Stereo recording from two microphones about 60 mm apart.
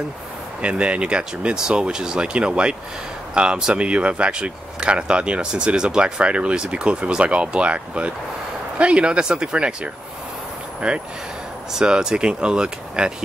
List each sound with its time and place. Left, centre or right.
0.6 s speech: centre
10.8 s speech: centre